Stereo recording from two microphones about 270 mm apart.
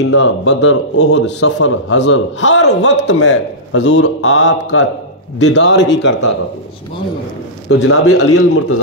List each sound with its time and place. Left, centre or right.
0.0 s a man's voice: left
7.8 s a man's voice: left